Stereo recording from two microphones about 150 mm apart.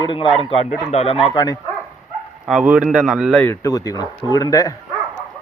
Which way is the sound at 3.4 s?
20° left (ahead or behind).